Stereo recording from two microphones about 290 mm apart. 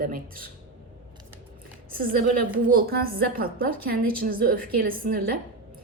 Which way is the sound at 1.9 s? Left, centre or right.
Right.